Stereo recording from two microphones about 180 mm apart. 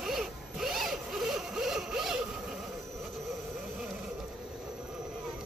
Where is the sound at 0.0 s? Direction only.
Centre (ahead or behind).